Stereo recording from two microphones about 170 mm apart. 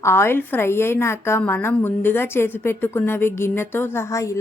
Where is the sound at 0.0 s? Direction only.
15° left (ahead or behind).